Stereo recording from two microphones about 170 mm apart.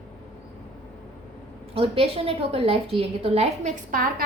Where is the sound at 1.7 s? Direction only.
35° right (ahead or behind).